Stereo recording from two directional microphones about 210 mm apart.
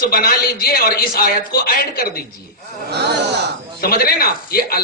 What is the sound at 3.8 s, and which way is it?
Speech, 45° left (ahead or behind).